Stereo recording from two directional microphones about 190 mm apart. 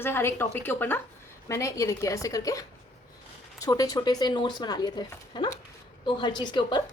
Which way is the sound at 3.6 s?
20° left (ahead or behind).